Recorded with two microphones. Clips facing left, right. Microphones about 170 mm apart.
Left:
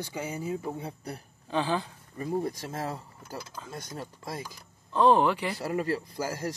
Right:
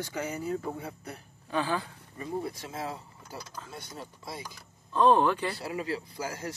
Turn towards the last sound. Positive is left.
turn(degrees=40)  # may be behind; listen again after turning